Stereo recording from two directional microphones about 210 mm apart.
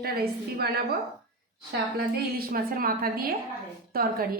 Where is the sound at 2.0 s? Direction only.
45° right (ahead or behind).